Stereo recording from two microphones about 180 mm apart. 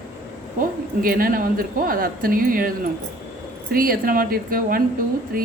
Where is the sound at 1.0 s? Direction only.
55° right (ahead or behind).